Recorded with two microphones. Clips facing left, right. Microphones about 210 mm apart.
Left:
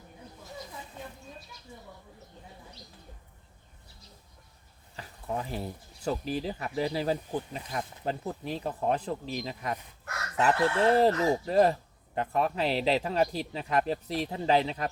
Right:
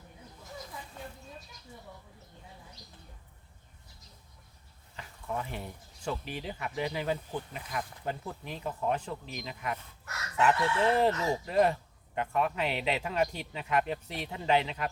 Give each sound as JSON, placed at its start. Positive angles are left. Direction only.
{"t": 4.9, "sound": "speech", "side_deg": 35}